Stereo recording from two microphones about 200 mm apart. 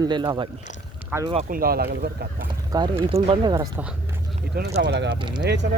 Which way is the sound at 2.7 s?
20° right (ahead or behind).